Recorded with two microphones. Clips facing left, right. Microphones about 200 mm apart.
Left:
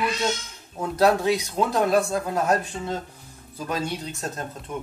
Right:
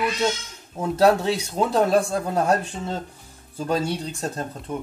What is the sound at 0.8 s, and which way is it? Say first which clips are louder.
Speech: right 2 dB; 30° right (ahead or behind).